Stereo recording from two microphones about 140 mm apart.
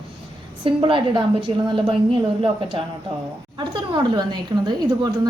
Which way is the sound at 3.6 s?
30° right (ahead or behind).